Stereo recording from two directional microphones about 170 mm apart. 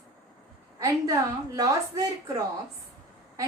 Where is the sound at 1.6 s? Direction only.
20° right (ahead or behind).